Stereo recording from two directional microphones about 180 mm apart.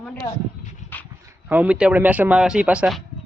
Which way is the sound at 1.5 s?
10° right (ahead or behind).